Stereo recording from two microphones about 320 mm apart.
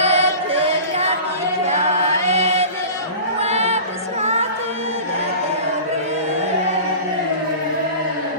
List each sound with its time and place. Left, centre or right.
0.0 s chant: centre
3.4 s music: centre